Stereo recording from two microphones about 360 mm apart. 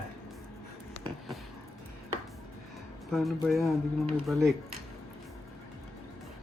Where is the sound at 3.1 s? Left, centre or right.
Centre.